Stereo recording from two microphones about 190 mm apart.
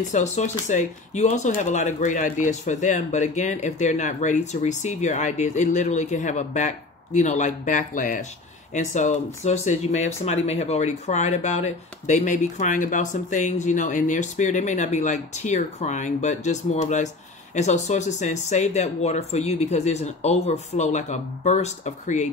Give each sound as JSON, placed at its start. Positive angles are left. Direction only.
{"t": 0.1, "sound": "speech", "side_deg": 40}